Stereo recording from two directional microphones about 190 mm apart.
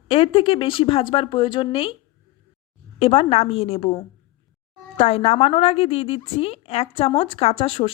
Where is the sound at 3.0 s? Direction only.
30° left (ahead or behind).